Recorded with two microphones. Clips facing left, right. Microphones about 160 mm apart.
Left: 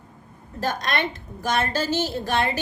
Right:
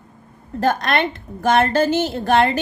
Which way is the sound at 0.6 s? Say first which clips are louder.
Right 7 dB; 55° right (ahead or behind).